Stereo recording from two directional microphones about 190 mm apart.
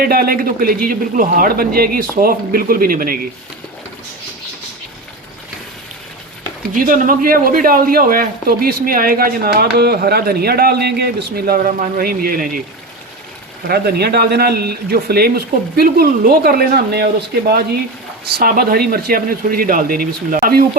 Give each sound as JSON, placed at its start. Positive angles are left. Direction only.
{"t": 0.0, "sound": "speech", "side_deg": -50}
{"t": 6.7, "sound": "speech", "side_deg": -45}
{"t": 13.7, "sound": "speech", "side_deg": -55}
{"t": 18.3, "sound": "speech", "side_deg": -50}